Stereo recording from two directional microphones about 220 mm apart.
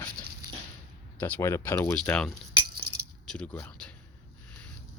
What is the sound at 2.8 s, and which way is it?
Keys jangling, 45° right (ahead or behind).